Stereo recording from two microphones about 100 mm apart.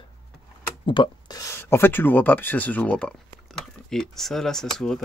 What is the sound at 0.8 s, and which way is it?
Speech, 55° left (ahead or behind).